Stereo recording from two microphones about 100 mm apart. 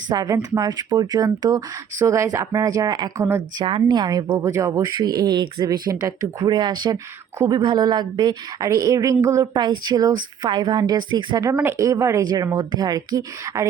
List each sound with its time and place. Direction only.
0.1 s speech: 45° right (ahead or behind)
3.6 s speech: 55° right (ahead or behind); by 4.9 s 35° right (ahead or behind)
4.9 s speech: 45° right (ahead or behind)
6.9 s speech: 25° right (ahead or behind)
7.5 s speech: 45° right (ahead or behind)
9.6 s speech: 45° right (ahead or behind)
11.6 s speech: 30° right (ahead or behind)
12.2 s speech: 45° right (ahead or behind)